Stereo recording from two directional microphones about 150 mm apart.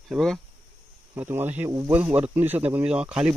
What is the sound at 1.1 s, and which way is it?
Speech, 15° right (ahead or behind).